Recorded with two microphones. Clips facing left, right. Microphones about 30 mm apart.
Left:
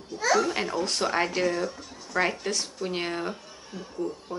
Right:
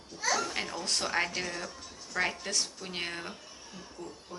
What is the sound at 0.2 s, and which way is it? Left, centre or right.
Speech, left.